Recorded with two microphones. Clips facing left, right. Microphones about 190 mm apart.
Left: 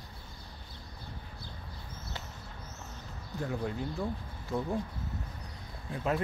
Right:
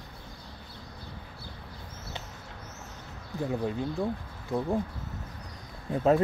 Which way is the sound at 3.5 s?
20° right (ahead or behind).